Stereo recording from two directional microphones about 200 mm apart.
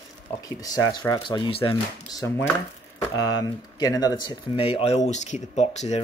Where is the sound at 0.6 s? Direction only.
20° left (ahead or behind).